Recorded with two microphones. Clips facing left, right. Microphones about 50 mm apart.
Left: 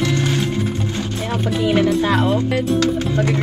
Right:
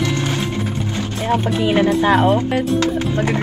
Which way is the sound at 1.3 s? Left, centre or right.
Right.